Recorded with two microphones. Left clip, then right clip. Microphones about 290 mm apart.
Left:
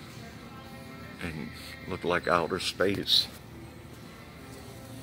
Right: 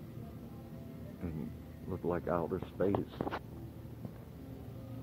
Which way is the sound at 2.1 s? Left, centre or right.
Left.